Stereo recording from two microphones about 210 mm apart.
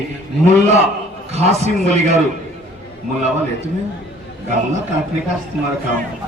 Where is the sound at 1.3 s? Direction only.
30° right (ahead or behind).